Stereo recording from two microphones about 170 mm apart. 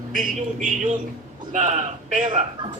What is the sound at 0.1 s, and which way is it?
A man's voice, 50° right (ahead or behind).